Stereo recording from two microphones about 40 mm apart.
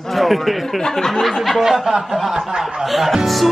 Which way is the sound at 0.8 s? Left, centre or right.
Centre.